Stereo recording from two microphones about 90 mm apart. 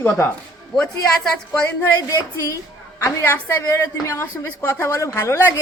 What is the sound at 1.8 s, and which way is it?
Speech, 35° left (ahead or behind).